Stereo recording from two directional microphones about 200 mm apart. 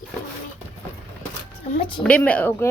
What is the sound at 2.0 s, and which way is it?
Speech, 5° left (ahead or behind).